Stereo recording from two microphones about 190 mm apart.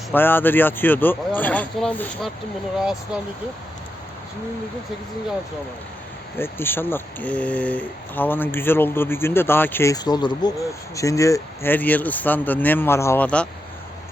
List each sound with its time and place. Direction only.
0.1 s speech: 10° left (ahead or behind)
6.4 s speech: 10° left (ahead or behind)